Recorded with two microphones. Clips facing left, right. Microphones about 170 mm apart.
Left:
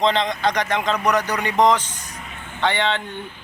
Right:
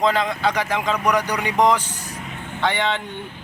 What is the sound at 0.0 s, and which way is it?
Speech, 5° right (ahead or behind).